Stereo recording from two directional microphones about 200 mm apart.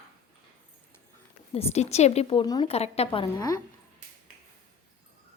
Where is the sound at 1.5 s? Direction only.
30° left (ahead or behind).